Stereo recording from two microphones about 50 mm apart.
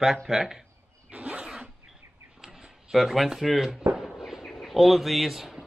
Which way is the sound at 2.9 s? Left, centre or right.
Centre.